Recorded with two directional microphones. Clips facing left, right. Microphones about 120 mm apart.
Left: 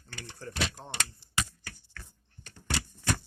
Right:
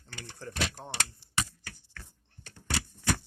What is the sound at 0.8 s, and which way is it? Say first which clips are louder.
Speech: right 2 dB; 10° right (ahead or behind).